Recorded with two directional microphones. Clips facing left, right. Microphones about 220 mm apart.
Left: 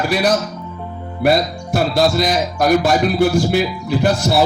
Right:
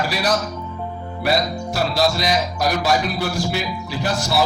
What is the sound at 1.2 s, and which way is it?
Speech, 55° left (ahead or behind).